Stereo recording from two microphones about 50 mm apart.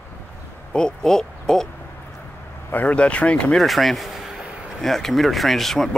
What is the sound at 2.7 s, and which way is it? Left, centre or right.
Speech, left.